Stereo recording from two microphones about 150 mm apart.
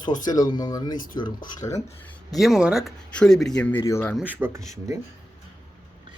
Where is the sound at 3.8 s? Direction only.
20° left (ahead or behind).